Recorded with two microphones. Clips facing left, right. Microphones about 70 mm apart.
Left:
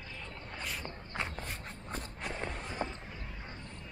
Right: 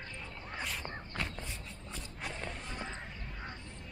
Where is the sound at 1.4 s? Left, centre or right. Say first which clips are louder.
Left 3 dB; left.